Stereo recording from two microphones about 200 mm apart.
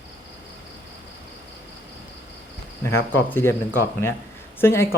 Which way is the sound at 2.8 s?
10° left (ahead or behind).